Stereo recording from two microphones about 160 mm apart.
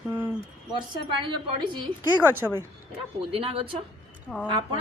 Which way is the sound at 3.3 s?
35° right (ahead or behind).